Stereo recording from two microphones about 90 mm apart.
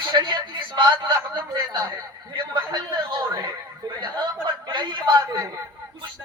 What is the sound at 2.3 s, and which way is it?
A man's voice, 65° right (ahead or behind).